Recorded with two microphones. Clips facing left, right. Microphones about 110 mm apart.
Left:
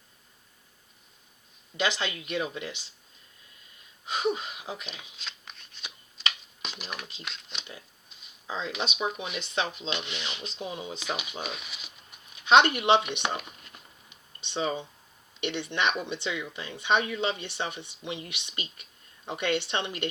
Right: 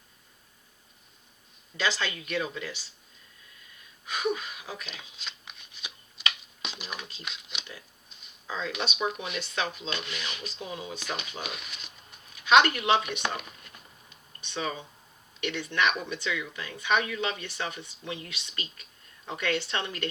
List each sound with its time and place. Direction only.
1.7 s speech: 20° left (ahead or behind)
4.0 s speech: 25° left (ahead or behind)
4.9 s shuffling cards: centre (ahead or behind)
6.7 s speech: 15° right (ahead or behind)
7.2 s speech: centre (ahead or behind)
8.4 s speech: 20° left (ahead or behind)
9.0 s speech: 5° left (ahead or behind)
9.4 s speech: 25° left (ahead or behind)
11.0 s speech: centre (ahead or behind)
12.3 s speech: 25° left (ahead or behind)
14.1 s a sound: 25° left (ahead or behind)
15.4 s speech: 25° left (ahead or behind)